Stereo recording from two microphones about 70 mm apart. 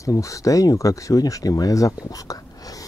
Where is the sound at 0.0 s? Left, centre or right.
Left.